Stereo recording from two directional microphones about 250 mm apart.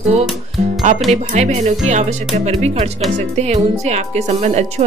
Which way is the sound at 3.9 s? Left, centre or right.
Right.